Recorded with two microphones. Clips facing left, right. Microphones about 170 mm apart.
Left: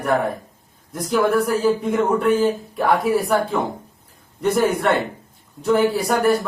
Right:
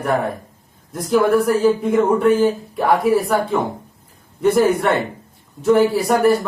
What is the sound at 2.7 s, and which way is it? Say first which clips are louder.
Speech: right 3 dB; centre (ahead or behind).